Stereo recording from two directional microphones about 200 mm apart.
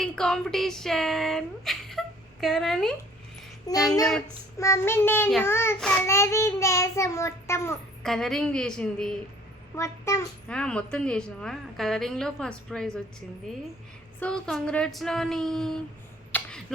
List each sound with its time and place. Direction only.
0.0 s speech: centre (ahead or behind)
3.7 s child singing: 15° left (ahead or behind)
8.0 s a child's voice: centre (ahead or behind)
9.7 s a child's voice: 15° left (ahead or behind)
14.2 s a child's voice: 5° left (ahead or behind)
16.3 s a sound: 5° left (ahead or behind)